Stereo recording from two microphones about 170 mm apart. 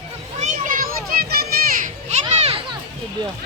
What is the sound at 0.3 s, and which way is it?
Children playing, 45° right (ahead or behind).